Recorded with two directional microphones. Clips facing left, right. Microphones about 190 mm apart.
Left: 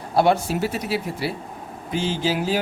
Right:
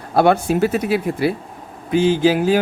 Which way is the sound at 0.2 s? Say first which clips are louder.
Right 4 dB; 55° right (ahead or behind).